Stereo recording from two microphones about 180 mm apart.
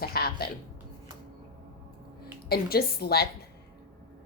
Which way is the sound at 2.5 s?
60° left (ahead or behind).